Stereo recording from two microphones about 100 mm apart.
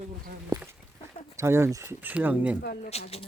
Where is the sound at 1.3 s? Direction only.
25° right (ahead or behind).